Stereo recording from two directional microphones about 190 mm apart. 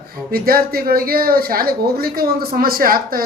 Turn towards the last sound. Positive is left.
turn(degrees=-50)  # may be behind; listen again after turning